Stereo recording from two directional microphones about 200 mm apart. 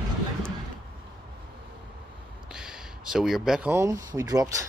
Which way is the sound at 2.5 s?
5° right (ahead or behind).